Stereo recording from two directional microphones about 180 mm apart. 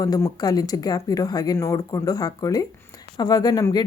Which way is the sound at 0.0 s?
20° left (ahead or behind).